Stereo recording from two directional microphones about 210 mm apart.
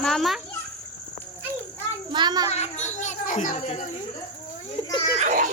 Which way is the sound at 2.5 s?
30° left (ahead or behind).